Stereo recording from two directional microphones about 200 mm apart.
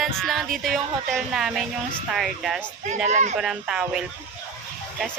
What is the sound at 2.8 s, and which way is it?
Speech, 35° right (ahead or behind).